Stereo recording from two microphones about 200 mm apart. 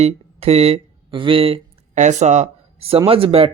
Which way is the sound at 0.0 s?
30° right (ahead or behind).